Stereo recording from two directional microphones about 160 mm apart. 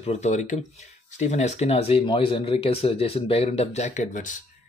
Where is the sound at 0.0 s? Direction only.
45° left (ahead or behind).